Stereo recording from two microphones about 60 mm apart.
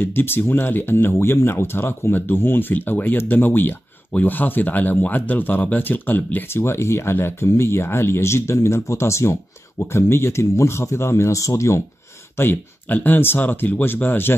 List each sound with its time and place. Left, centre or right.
0.0 s speech: left
12.4 s speech: left